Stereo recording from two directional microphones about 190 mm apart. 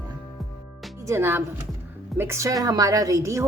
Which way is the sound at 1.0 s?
15° right (ahead or behind).